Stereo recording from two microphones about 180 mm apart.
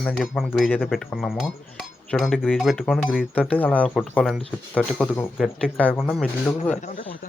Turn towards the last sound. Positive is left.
turn(degrees=5)  # may be behind; listen again after turning